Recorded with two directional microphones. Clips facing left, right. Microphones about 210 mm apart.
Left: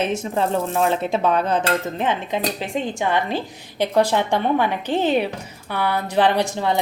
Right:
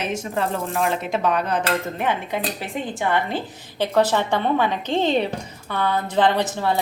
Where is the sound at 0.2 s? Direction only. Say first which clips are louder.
Left 3 dB; 25° left (ahead or behind).